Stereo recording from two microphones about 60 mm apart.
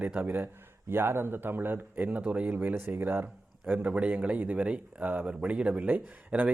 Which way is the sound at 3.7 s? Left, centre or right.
Right.